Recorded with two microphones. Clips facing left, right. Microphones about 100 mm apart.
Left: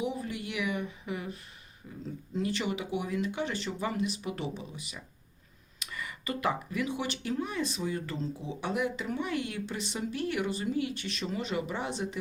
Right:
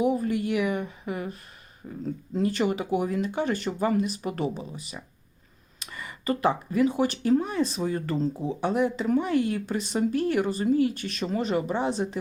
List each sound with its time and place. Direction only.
0.0 s speech: 50° right (ahead or behind)